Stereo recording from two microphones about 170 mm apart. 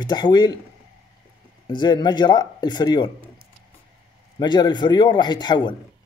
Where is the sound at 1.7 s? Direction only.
25° left (ahead or behind).